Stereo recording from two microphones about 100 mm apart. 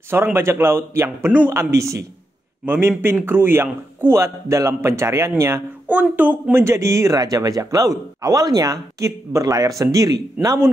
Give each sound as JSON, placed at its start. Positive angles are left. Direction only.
{"t": 0.1, "sound": "speech", "side_deg": -25}
{"t": 2.6, "sound": "speech", "side_deg": -20}
{"t": 5.9, "sound": "speech", "side_deg": -15}